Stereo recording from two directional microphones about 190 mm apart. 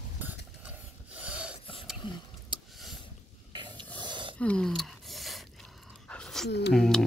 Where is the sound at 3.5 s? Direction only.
25° right (ahead or behind).